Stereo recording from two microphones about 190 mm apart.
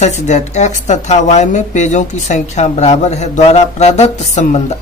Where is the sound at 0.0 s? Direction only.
40° left (ahead or behind).